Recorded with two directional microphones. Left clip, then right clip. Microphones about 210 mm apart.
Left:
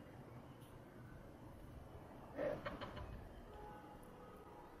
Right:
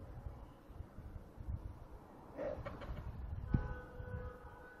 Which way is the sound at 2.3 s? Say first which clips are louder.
Even; 15° right (ahead or behind).